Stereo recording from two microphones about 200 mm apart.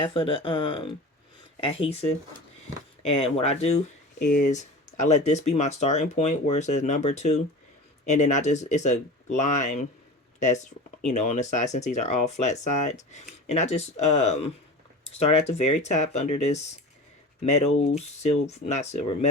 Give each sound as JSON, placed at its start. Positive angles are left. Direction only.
{"t": 0.0, "sound": "speech", "side_deg": 25}
{"t": 3.1, "sound": "speech", "side_deg": 30}